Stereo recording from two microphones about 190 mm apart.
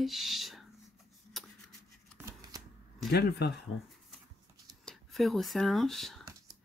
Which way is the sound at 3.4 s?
60° left (ahead or behind).